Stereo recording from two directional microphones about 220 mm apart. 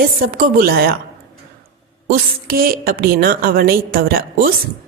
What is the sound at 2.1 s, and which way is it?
A woman's voice, 40° right (ahead or behind).